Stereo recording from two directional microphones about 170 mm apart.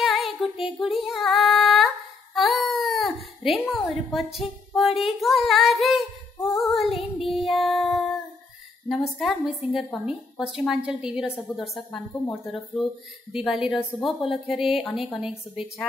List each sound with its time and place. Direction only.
0.0 s female singing: centre (ahead or behind)
3.7 s speech: centre (ahead or behind)
6.3 s female singing: 15° left (ahead or behind)
6.6 s female singing: centre (ahead or behind)
7.2 s child singing: centre (ahead or behind)
8.8 s speech: centre (ahead or behind)